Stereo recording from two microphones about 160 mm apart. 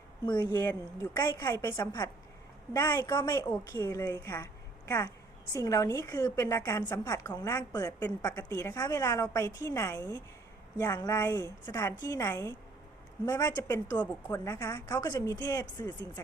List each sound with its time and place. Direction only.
0.3 s a woman's voice: 25° left (ahead or behind)